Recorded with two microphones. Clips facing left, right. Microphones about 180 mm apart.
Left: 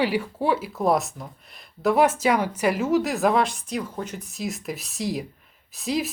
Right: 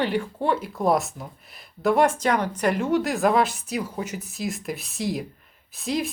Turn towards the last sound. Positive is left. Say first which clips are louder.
# even
turn(degrees=0)  # may be behind; listen again after turning